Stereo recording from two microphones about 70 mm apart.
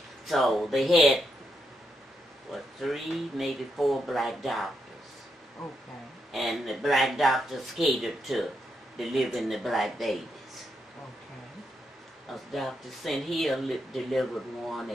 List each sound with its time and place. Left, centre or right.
0.3 s speech: centre
2.5 s speech: centre
12.5 s speech: centre